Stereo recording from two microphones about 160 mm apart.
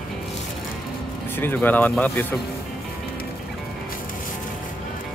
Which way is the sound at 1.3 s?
10° left (ahead or behind).